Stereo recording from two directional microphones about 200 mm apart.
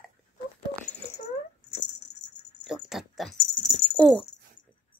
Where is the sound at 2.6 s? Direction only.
Centre (ahead or behind).